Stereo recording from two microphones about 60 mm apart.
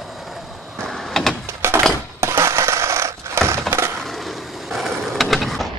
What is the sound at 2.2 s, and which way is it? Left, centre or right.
Coin, right.